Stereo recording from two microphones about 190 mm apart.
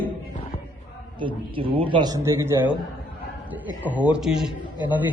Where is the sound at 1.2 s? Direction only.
25° right (ahead or behind).